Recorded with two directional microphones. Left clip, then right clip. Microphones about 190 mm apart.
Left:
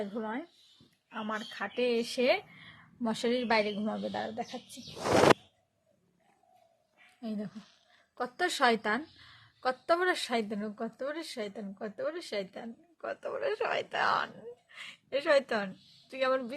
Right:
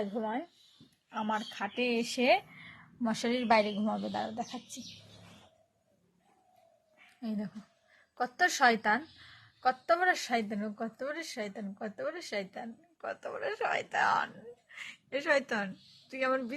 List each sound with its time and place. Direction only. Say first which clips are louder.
0.0 s speech: right 2 dB; centre (ahead or behind); by 4.6 s 15° left (ahead or behind)
7.2 s speech: even; 10° left (ahead or behind)
15.3 s speech: left 2 dB; 20° left (ahead or behind)